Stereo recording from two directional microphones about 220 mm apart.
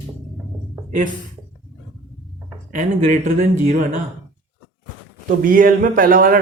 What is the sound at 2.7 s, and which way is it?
Speech, 40° right (ahead or behind).